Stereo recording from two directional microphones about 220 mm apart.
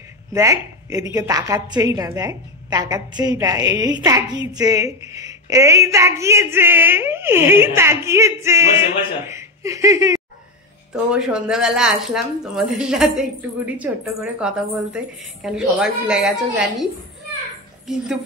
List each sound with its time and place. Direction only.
0.3 s a woman's voice: 15° right (ahead or behind)
10.9 s a woman's voice: 5° right (ahead or behind)